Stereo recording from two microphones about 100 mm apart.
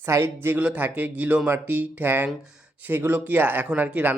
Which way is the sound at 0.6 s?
15° right (ahead or behind).